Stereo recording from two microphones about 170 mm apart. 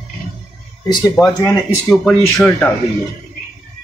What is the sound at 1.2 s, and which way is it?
Speech, centre (ahead or behind).